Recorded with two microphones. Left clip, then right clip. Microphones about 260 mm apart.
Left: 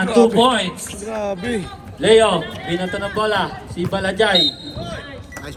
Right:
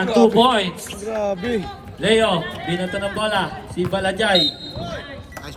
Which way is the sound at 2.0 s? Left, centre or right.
Centre.